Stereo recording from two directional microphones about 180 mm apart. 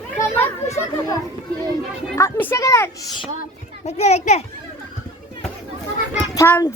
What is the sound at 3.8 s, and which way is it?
Speech, 35° left (ahead or behind).